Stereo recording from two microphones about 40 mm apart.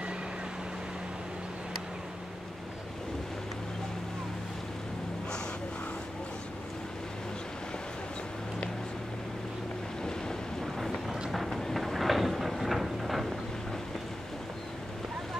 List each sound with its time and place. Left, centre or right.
10.0 s boat: centre
11.2 s boat: centre
11.5 s vehicle: centre